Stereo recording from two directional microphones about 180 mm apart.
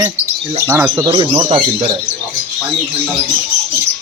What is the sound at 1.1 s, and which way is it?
Speech, 25° right (ahead or behind).